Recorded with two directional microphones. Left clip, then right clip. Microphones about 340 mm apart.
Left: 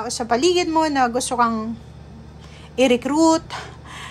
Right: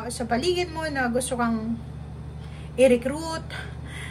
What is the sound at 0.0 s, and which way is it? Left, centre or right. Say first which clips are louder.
A woman's voice: left 7 dB; centre.